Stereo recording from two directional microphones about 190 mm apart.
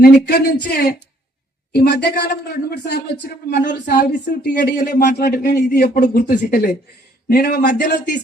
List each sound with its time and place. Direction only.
0.0 s speech: 55° left (ahead or behind)